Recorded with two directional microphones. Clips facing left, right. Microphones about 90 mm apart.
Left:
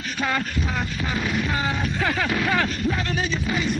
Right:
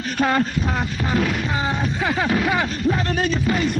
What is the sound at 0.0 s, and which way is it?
Speech, 40° right (ahead or behind).